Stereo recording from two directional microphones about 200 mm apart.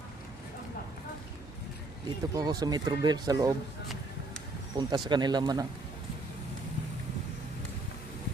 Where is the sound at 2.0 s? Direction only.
20° right (ahead or behind).